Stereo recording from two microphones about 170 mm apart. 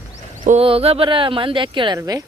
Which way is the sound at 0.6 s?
35° right (ahead or behind).